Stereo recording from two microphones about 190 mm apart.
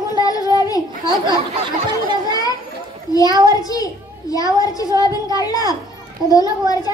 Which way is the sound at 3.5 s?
20° left (ahead or behind).